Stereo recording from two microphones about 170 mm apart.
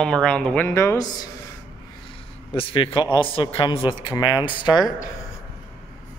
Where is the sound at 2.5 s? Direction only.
30° left (ahead or behind).